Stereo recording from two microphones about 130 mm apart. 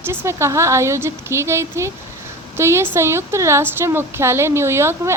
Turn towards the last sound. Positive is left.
turn(degrees=-20)  # may be behind; listen again after turning